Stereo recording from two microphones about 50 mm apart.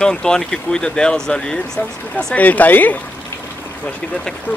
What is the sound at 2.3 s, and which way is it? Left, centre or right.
Speech, left.